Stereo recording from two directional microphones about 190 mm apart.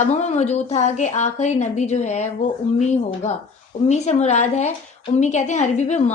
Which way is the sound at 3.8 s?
35° left (ahead or behind).